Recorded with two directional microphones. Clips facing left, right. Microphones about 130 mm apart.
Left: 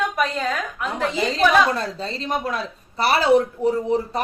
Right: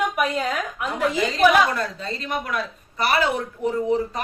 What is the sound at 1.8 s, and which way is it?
A man's voice, 30° left (ahead or behind).